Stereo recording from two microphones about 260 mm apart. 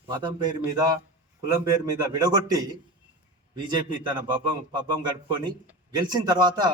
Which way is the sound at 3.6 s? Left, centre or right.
Centre.